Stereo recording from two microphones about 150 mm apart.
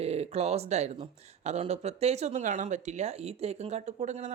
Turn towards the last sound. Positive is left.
turn(degrees=-50)  # may be behind; listen again after turning